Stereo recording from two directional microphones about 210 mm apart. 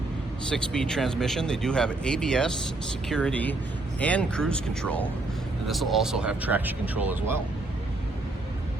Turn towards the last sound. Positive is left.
turn(degrees=-10)  # may be behind; listen again after turning